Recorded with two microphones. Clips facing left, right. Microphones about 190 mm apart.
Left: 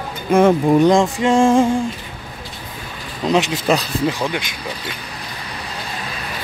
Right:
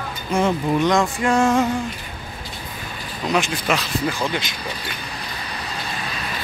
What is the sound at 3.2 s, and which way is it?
Speech, 25° left (ahead or behind).